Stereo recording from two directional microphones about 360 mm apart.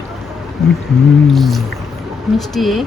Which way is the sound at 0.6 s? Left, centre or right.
Centre.